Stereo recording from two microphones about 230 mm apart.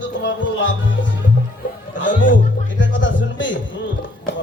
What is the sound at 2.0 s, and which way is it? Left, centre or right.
Music, left.